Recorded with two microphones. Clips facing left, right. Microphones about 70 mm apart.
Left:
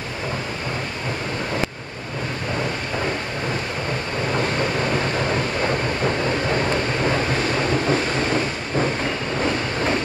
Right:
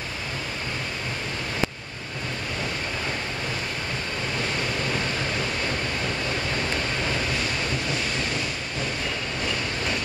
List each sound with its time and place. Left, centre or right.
7.9 s vehicle: left